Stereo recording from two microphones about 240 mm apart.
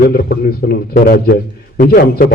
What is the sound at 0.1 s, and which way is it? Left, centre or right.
A man's voice, left.